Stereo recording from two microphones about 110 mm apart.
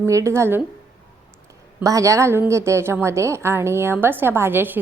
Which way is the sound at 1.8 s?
30° right (ahead or behind).